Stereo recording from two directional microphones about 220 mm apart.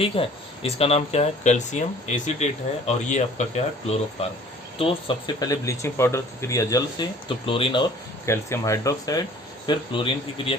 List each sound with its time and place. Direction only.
0.0 s speech: 25° left (ahead or behind)